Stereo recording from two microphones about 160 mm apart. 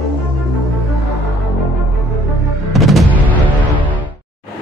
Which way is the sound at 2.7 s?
Centre (ahead or behind).